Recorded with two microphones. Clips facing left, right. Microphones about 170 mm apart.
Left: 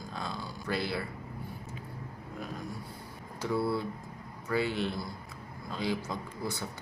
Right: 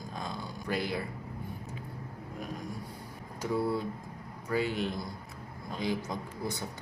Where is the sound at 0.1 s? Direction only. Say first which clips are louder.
Even; 15° right (ahead or behind).